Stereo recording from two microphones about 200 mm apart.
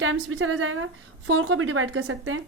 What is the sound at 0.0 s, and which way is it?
A woman's voice, 80° right.